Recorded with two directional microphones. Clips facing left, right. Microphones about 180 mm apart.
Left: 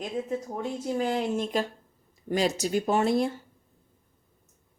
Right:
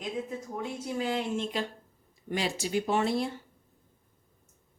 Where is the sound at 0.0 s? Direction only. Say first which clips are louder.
Left 4 dB; 40° left (ahead or behind).